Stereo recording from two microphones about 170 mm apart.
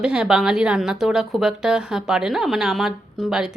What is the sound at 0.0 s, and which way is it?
A woman's voice, 5° right (ahead or behind).